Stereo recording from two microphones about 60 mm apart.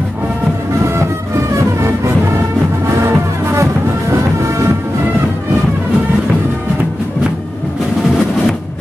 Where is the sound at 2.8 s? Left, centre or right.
Right.